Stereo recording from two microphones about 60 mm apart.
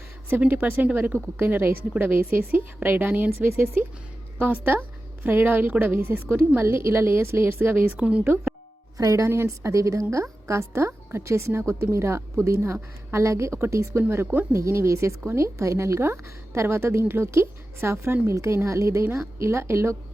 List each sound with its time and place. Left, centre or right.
0.3 s a woman's voice: right
7.9 s speech: centre
9.0 s speech: right
9.2 s a woman's voice: right
18.3 s a woman's voice: right